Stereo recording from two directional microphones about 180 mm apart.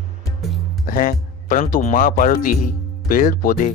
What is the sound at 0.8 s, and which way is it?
Speech, 50° left (ahead or behind).